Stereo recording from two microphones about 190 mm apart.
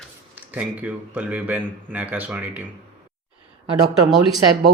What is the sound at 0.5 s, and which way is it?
Speech, 10° right (ahead or behind).